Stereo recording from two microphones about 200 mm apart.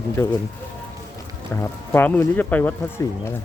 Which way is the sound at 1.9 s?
10° left (ahead or behind).